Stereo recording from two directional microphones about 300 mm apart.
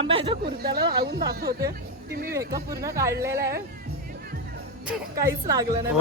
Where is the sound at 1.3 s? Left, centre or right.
Right.